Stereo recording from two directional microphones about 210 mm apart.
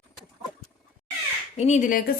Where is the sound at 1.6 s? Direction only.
35° left (ahead or behind).